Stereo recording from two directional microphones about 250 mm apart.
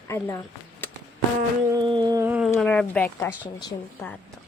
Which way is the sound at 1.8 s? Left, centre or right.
Centre.